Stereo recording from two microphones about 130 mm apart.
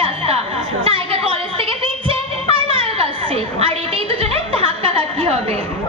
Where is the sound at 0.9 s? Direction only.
45° right (ahead or behind).